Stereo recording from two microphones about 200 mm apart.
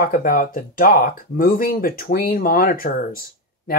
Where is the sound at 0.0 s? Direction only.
45° left (ahead or behind).